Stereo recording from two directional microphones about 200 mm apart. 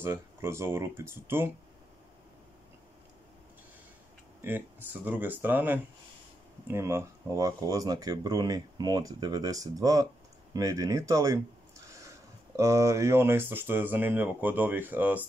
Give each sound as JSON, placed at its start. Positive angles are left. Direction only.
{"t": 0.0, "sound": "speech", "side_deg": -15}
{"t": 4.4, "sound": "speech", "side_deg": -10}
{"t": 12.5, "sound": "speech", "side_deg": -15}